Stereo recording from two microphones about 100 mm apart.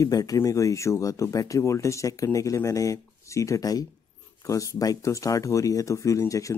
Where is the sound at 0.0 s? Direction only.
40° left (ahead or behind).